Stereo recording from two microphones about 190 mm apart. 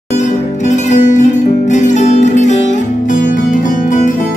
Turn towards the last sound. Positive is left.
turn(degrees=40)  # may be behind; listen again after turning